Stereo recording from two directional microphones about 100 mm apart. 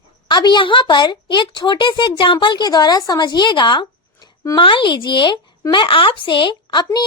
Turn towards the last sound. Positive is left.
turn(degrees=45)  # may be behind; listen again after turning